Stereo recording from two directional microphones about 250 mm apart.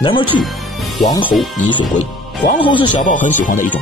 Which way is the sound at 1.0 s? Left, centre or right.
Centre.